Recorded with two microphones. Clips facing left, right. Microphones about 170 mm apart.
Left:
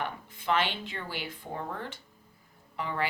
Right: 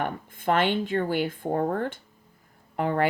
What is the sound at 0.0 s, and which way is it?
A woman's voice, 50° right (ahead or behind).